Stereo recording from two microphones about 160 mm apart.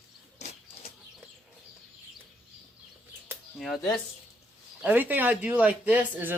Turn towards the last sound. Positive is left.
turn(degrees=-10)  # may be behind; listen again after turning